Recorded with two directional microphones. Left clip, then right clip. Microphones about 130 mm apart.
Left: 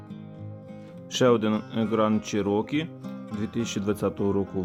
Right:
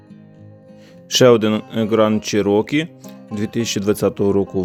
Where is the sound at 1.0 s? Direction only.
40° right (ahead or behind).